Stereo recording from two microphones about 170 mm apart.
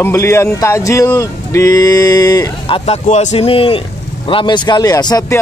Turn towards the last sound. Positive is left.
turn(degrees=20)  # may be behind; listen again after turning